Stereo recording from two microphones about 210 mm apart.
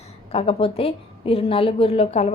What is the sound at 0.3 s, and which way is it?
A woman's voice, 25° left (ahead or behind).